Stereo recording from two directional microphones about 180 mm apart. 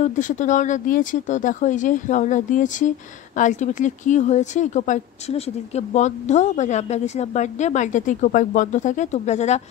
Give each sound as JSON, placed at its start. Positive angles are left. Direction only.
{"t": 0.0, "sound": "speech", "side_deg": 45}